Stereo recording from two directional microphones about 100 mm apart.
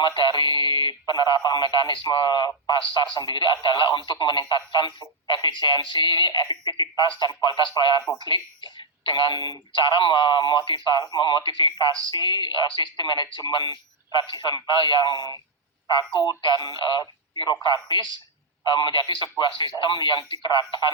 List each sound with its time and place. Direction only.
0.0 s speech: 55° left (ahead or behind)